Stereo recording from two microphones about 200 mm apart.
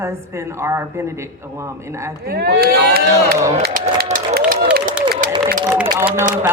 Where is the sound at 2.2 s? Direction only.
50° right (ahead or behind).